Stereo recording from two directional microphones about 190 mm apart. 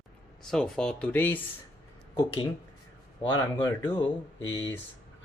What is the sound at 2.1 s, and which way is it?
Speech, 25° left (ahead or behind).